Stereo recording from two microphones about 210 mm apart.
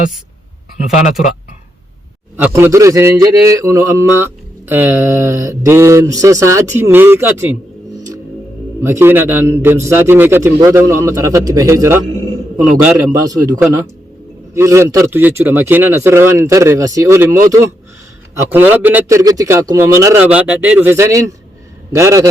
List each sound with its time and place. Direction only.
2.3 s a man's voice: 10° right (ahead or behind)
8.8 s a man's voice: 10° right (ahead or behind)
13.0 s a man's voice: 15° right (ahead or behind)